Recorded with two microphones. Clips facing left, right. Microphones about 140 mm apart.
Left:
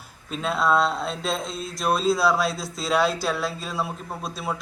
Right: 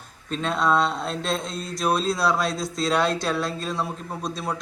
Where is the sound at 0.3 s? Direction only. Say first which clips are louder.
Even; 5° left (ahead or behind).